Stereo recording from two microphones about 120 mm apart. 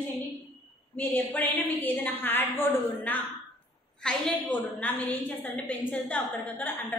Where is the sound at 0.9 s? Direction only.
15° left (ahead or behind).